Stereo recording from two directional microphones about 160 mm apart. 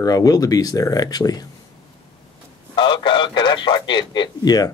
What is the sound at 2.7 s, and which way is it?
Radio, 30° left (ahead or behind).